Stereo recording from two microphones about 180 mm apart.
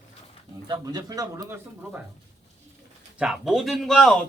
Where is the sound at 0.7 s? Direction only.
20° right (ahead or behind).